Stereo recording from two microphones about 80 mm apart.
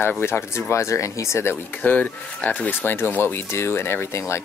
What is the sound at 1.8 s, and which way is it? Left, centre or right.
Speech, centre.